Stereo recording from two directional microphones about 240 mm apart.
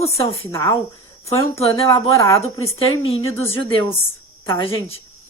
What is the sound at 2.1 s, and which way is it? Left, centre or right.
Speech, centre.